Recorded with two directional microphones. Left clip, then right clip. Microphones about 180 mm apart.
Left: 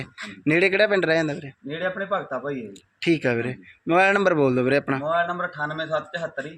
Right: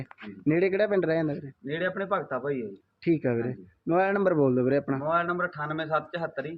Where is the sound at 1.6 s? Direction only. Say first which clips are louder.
Left 2 dB; 20° right (ahead or behind).